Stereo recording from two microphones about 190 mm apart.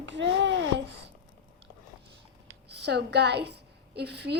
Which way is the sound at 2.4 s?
60° right (ahead or behind).